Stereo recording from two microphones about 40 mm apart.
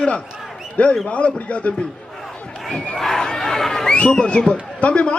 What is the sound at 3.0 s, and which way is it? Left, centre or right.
Speech, centre.